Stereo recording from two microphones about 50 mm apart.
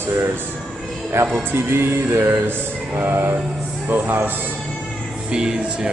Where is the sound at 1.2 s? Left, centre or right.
Right.